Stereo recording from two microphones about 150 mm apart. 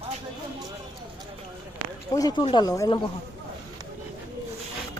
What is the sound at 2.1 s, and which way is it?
Speech, 25° left (ahead or behind).